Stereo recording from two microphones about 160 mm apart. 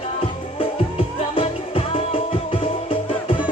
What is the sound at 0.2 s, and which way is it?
Music, 35° left (ahead or behind).